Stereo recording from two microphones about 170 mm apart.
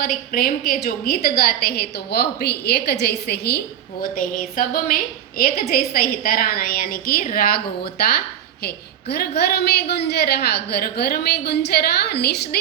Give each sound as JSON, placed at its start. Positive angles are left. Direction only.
{"t": 0.0, "sound": "a woman's voice", "side_deg": 60}
{"t": 4.1, "sound": "a woman's voice", "side_deg": 55}
{"t": 9.1, "sound": "a woman's voice", "side_deg": 70}